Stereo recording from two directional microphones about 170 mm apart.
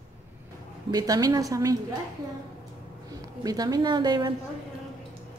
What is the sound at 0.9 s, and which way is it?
Speech, 20° right (ahead or behind).